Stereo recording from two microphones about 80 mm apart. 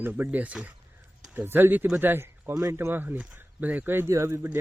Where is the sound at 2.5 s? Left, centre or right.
Right.